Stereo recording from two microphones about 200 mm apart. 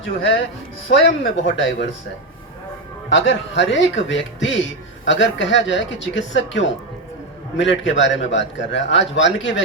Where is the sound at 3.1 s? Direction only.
65° left (ahead or behind).